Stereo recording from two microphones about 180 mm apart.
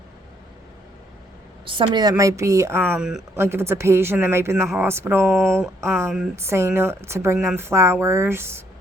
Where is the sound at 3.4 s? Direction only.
15° right (ahead or behind).